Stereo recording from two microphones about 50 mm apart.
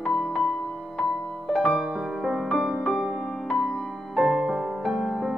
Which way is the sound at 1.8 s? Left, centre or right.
Centre.